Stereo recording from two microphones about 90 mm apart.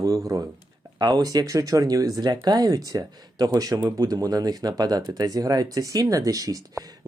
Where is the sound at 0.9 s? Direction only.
50° right (ahead or behind).